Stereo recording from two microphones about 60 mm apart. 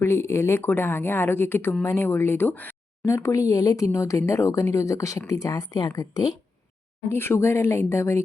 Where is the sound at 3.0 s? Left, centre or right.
Left.